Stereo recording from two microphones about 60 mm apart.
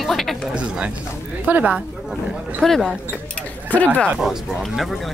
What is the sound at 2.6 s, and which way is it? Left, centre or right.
Speech, centre.